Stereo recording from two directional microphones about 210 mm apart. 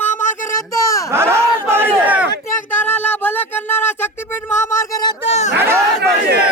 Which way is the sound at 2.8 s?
10° left (ahead or behind).